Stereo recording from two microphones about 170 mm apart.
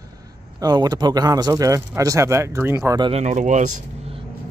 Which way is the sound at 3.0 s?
40° right (ahead or behind).